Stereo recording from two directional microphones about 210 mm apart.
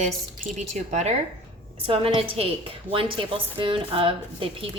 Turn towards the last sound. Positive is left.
turn(degrees=-25)  # may be behind; listen again after turning